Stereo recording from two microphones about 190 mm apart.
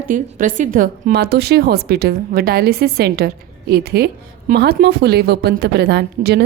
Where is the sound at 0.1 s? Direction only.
45° right (ahead or behind).